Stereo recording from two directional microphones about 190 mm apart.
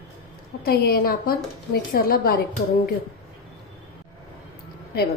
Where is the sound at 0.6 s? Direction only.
55° left (ahead or behind).